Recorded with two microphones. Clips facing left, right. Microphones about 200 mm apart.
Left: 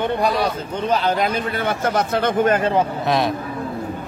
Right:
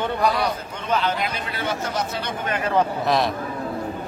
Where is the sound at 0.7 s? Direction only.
35° left (ahead or behind).